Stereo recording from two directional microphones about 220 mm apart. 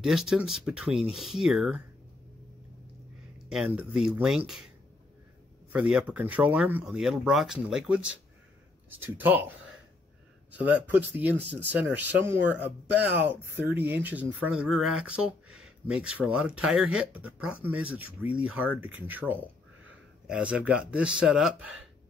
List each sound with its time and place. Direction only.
0.0 s speech: centre (ahead or behind)
3.4 s speech: 5° right (ahead or behind)
5.7 s speech: 5° right (ahead or behind)
10.5 s speech: 5° right (ahead or behind)